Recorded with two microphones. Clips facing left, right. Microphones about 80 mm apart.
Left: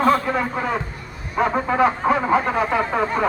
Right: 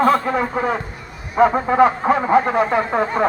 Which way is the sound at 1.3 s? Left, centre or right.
Right.